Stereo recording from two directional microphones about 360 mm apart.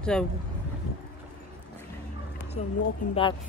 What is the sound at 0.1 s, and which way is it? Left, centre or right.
Speech, centre.